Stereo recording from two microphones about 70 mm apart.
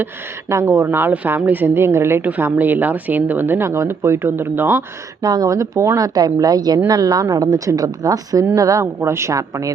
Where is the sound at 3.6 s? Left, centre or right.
Right.